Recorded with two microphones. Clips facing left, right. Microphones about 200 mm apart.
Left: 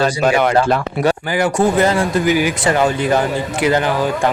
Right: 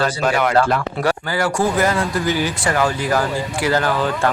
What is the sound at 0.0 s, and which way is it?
A man's voice, 15° left (ahead or behind).